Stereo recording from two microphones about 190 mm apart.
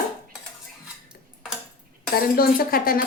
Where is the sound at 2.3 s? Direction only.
50° left (ahead or behind).